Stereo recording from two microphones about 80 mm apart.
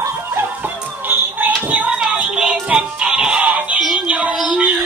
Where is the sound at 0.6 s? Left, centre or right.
Right.